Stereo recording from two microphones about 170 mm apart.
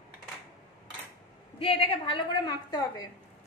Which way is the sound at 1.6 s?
35° left (ahead or behind).